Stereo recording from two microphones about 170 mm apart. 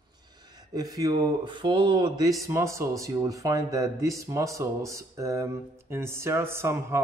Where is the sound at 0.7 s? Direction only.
20° right (ahead or behind).